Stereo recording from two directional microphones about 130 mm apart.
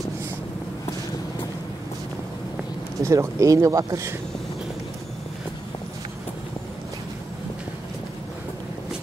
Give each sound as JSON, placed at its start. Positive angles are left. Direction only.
{"t": 3.0, "sound": "speech", "side_deg": -25}